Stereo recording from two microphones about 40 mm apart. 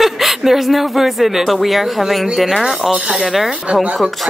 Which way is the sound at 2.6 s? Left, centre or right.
Right.